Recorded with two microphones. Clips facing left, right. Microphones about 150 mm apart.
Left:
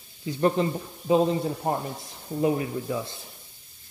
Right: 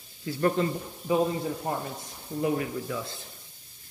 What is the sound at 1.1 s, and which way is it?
A man's voice, 30° left (ahead or behind).